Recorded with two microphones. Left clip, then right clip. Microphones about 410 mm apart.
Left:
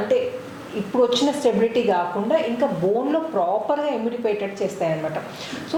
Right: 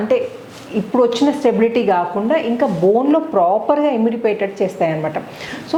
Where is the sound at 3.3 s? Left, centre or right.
Right.